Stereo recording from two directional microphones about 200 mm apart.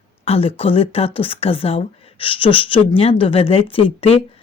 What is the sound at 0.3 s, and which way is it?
Speech, 30° left (ahead or behind).